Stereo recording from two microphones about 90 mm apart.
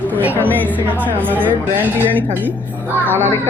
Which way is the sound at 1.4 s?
20° left (ahead or behind).